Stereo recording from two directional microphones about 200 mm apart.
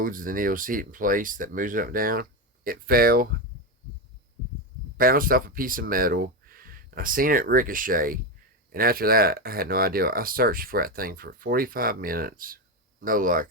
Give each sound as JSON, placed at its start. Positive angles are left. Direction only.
{"t": 0.0, "sound": "speech", "side_deg": -45}
{"t": 4.9, "sound": "speech", "side_deg": -45}